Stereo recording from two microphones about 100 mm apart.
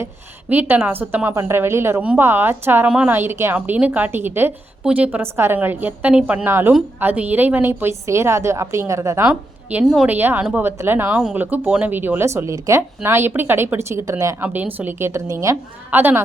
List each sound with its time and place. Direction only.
0.5 s speech: 20° right (ahead or behind)
4.8 s a woman's voice: 10° right (ahead or behind); by 9.2 s 30° right (ahead or behind)
9.2 s a woman's voice: 15° right (ahead or behind); by 14.3 s 30° right (ahead or behind)
14.4 s speech: 20° right (ahead or behind)